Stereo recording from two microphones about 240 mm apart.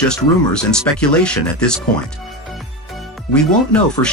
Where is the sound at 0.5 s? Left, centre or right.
Centre.